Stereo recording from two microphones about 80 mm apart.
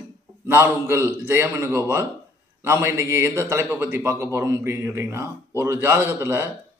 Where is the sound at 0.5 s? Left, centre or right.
Right.